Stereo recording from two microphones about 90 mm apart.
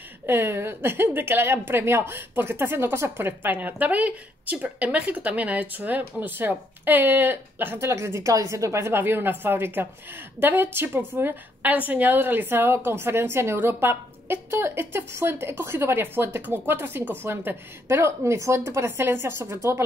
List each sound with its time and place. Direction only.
0.3 s a woman's voice: 25° right (ahead or behind)